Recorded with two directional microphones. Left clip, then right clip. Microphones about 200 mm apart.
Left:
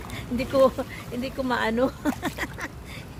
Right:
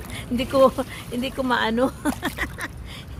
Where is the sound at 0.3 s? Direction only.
15° right (ahead or behind).